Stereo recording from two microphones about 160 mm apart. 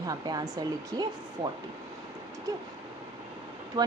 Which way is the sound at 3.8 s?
25° right (ahead or behind).